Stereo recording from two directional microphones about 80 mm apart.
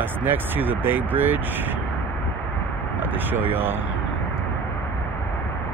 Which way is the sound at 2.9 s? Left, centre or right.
Right.